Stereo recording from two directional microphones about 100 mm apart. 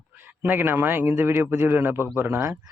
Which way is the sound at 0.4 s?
20° right (ahead or behind).